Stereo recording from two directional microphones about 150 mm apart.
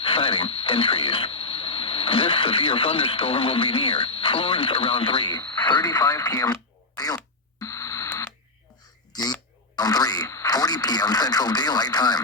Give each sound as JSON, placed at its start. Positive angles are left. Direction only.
{"t": 0.0, "sound": "radio", "side_deg": 35}
{"t": 9.7, "sound": "radio", "side_deg": 25}